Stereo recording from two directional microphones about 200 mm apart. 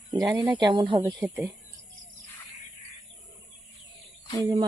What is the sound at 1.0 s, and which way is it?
Speech, 10° right (ahead or behind).